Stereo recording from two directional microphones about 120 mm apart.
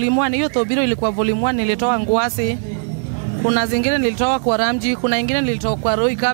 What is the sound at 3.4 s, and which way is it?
Speech, 20° right (ahead or behind).